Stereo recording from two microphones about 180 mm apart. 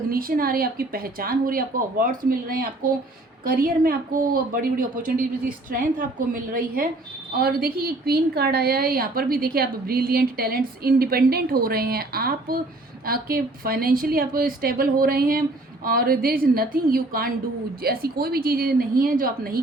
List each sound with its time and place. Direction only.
0.1 s a woman's voice: 55° right (ahead or behind)